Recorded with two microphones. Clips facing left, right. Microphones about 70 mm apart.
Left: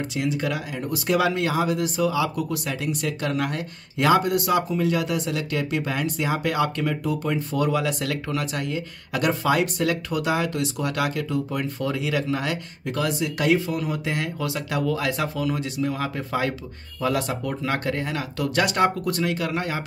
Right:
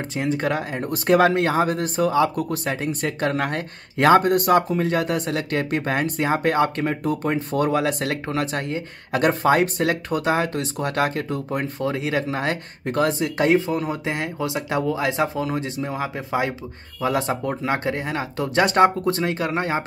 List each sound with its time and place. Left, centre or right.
0.1 s speech: right